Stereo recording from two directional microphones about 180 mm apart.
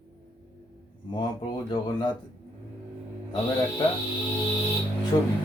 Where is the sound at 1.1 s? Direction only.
25° left (ahead or behind).